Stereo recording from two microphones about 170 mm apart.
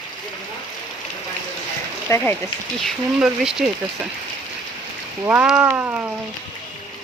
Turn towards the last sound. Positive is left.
turn(degrees=-10)  # may be behind; listen again after turning